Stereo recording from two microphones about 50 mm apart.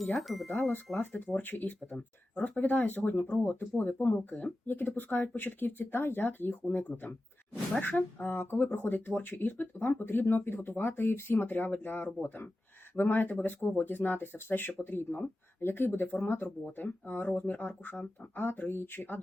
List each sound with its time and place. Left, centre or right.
0.0 s speech: centre
0.9 s speech: centre
1.3 s speech: left
15.6 s speech: left